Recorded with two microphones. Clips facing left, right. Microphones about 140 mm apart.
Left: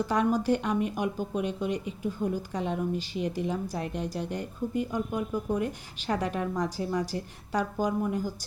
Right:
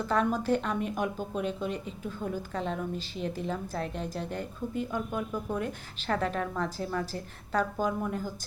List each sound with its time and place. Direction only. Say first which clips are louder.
0.1 s speech: even; 10° left (ahead or behind)